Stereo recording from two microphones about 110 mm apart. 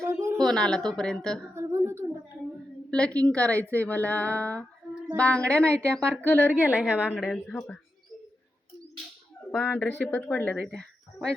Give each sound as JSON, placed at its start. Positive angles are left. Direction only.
{"t": 0.0, "sound": "a sound", "side_deg": -25}
{"t": 0.4, "sound": "a woman's voice", "side_deg": 5}
{"t": 1.5, "sound": "a sound", "side_deg": -25}
{"t": 2.9, "sound": "a woman's voice", "side_deg": 10}
{"t": 6.5, "sound": "a woman's voice", "side_deg": -15}
{"t": 7.2, "sound": "a woman's voice", "side_deg": 0}
{"t": 9.6, "sound": "a woman's voice", "side_deg": 15}